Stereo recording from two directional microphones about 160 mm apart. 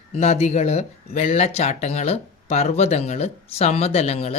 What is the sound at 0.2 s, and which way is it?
Speech, 45° left (ahead or behind).